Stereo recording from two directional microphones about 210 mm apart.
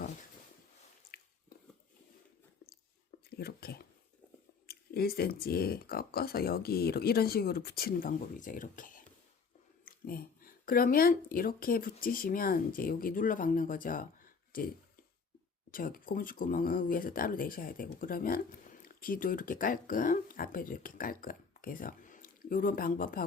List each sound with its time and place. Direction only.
1.1 s drip: 45° left (ahead or behind)
3.2 s speech: 50° left (ahead or behind)
10.1 s speech: 45° left (ahead or behind)
15.7 s speech: 40° left (ahead or behind)